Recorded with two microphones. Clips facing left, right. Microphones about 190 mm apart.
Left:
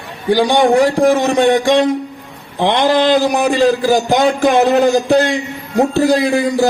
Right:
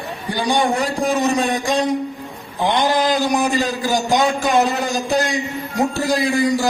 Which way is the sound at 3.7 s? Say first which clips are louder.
Left 6 dB; 60° left (ahead or behind).